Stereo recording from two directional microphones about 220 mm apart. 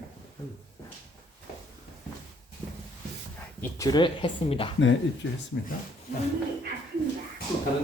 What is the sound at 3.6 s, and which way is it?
Speech, 15° left (ahead or behind).